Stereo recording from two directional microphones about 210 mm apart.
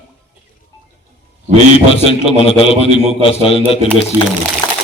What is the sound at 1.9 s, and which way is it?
A man's voice, 25° left (ahead or behind).